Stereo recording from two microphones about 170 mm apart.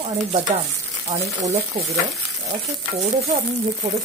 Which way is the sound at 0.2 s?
45° right (ahead or behind).